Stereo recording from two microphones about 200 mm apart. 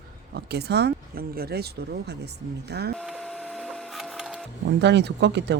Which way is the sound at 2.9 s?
5° left (ahead or behind).